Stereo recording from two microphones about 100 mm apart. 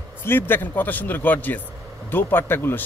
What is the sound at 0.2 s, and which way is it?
A man's voice, 20° left (ahead or behind).